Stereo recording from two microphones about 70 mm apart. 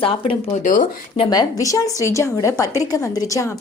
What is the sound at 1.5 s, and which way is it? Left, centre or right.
A woman's voice, left.